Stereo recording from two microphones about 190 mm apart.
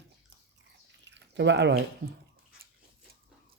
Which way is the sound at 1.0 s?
65° right (ahead or behind).